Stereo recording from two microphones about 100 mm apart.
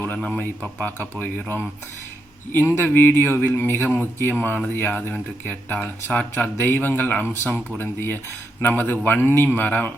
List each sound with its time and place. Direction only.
0.1 s a man's voice: 15° left (ahead or behind)
2.7 s a man's voice: 20° left (ahead or behind)